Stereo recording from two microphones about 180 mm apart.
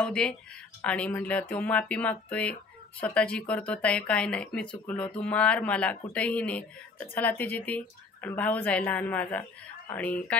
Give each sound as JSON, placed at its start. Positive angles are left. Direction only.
{"t": 0.0, "sound": "speech", "side_deg": 5}